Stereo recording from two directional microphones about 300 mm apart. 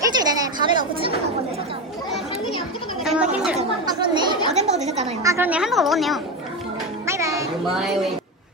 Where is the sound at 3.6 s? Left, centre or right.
Centre.